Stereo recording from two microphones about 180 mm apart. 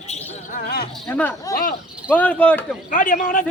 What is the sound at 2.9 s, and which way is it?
Speech, 45° left (ahead or behind).